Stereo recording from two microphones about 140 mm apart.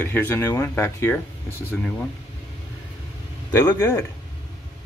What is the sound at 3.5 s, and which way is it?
Speech, 20° left (ahead or behind).